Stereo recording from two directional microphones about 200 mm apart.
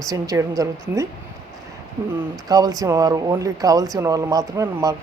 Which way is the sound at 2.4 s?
20° right (ahead or behind).